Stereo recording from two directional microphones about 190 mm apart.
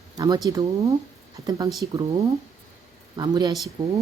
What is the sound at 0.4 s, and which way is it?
A woman's voice, 20° right (ahead or behind).